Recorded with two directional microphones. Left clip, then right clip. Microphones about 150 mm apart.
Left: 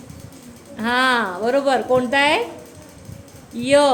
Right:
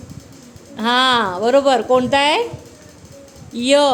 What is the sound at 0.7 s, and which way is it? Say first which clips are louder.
A woman's voice: right 3 dB; 35° right (ahead or behind).